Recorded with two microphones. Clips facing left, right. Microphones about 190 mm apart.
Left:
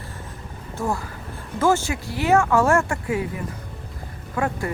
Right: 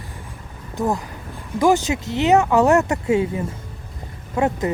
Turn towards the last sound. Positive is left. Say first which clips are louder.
# right 5 dB
turn(degrees=-20)  # may be behind; listen again after turning